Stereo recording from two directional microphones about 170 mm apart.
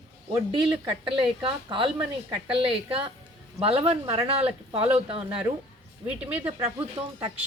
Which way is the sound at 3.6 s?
35° right (ahead or behind).